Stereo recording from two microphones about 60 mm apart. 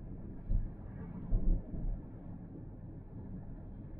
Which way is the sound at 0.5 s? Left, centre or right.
Right.